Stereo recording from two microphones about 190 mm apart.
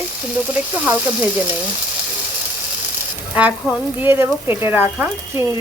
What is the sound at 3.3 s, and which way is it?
Speech, 5° right (ahead or behind).